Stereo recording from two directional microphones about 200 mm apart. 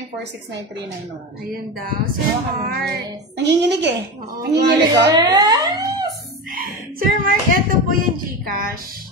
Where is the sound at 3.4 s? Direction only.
60° right (ahead or behind).